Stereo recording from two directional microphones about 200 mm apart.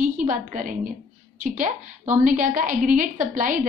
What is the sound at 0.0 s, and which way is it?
Speech, 40° right (ahead or behind).